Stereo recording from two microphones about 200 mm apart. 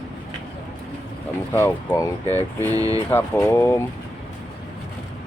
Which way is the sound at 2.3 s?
15° right (ahead or behind).